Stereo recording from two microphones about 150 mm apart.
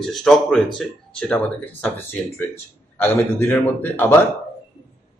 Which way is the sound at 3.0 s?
15° left (ahead or behind).